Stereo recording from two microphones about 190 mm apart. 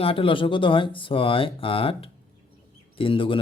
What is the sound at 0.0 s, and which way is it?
Speech, 30° left (ahead or behind).